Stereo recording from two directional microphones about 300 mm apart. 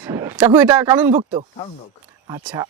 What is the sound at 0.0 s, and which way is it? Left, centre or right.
Speech, centre.